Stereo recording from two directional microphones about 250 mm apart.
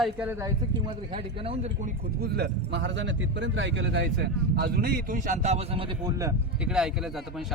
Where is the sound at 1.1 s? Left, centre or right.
Right.